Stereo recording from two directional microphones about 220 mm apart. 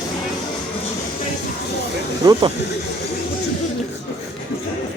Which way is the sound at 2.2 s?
15° right (ahead or behind).